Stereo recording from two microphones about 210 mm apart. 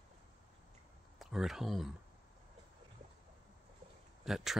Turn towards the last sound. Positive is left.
turn(degrees=0)  # may be behind; listen again after turning